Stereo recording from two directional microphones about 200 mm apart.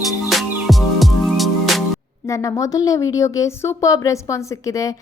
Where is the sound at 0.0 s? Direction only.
Centre (ahead or behind).